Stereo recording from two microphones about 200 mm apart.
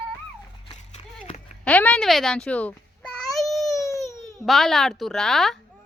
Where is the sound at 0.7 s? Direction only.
35° left (ahead or behind).